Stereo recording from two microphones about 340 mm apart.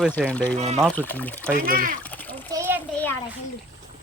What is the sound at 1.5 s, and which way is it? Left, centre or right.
Speech, right.